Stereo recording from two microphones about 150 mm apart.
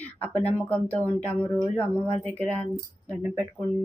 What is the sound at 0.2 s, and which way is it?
Speech, 10° left (ahead or behind).